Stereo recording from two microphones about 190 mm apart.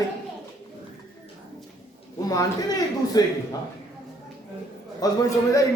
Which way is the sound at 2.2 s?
20° left (ahead or behind).